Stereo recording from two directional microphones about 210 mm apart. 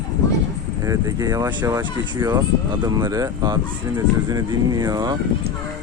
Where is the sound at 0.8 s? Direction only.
15° right (ahead or behind).